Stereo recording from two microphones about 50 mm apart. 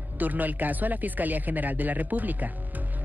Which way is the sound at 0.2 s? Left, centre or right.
Right.